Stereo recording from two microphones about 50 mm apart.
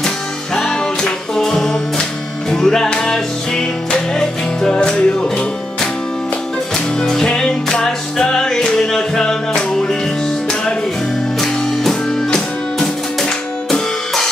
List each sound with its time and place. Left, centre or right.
0.6 s music: centre
7.0 s music: centre
11.4 s music: centre